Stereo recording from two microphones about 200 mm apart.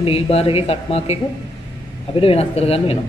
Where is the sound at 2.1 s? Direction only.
30° left (ahead or behind).